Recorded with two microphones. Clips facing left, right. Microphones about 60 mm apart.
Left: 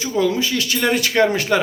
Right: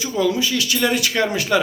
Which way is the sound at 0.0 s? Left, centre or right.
Left.